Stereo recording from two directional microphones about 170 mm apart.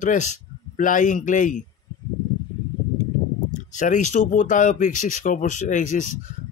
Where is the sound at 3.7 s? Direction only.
45° left (ahead or behind).